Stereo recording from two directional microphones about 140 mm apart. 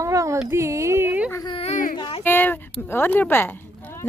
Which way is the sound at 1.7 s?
80° left.